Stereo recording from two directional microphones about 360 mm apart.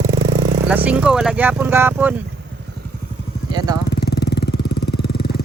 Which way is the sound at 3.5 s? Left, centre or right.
Centre.